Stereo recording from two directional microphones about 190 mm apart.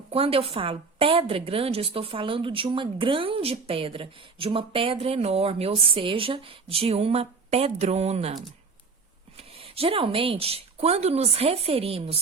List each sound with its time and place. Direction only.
0.1 s a woman's voice: 30° right (ahead or behind)
9.4 s speech: 30° right (ahead or behind)